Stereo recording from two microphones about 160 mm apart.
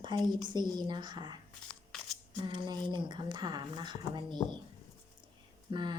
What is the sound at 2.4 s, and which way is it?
A woman's voice, 25° right (ahead or behind).